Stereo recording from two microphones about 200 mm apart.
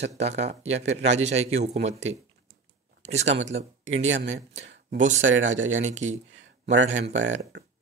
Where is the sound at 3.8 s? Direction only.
70° right (ahead or behind).